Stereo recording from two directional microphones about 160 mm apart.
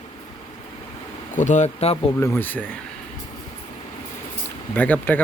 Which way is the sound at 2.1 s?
15° left (ahead or behind).